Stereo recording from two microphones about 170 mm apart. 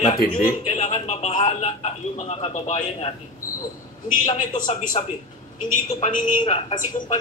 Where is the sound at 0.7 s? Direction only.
40° left (ahead or behind).